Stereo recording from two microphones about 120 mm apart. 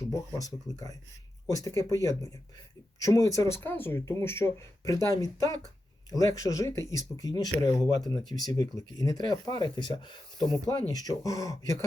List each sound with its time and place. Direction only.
0.4 s speech: 30° left (ahead or behind)